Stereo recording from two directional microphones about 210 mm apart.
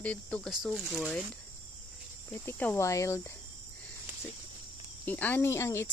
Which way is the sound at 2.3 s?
10° left (ahead or behind).